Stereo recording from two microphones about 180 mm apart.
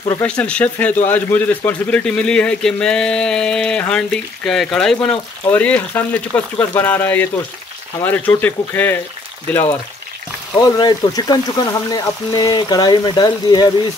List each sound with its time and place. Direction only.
0.2 s speech: 5° left (ahead or behind)
10.6 s speech: 20° left (ahead or behind)